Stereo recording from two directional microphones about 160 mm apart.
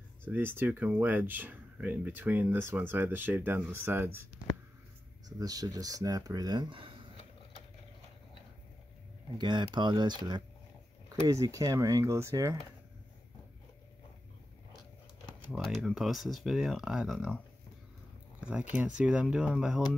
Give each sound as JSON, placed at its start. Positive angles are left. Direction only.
{"t": 0.2, "sound": "speech", "side_deg": -15}
{"t": 5.4, "sound": "speech", "side_deg": -25}
{"t": 9.4, "sound": "speech", "side_deg": -30}
{"t": 15.8, "sound": "speech", "side_deg": 0}
{"t": 18.4, "sound": "speech", "side_deg": -5}